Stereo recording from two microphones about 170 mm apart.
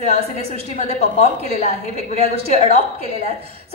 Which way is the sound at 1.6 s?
40° left (ahead or behind).